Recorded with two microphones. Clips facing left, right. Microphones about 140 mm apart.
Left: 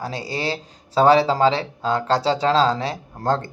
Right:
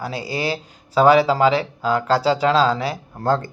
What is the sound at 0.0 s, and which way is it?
Speech, 35° left (ahead or behind).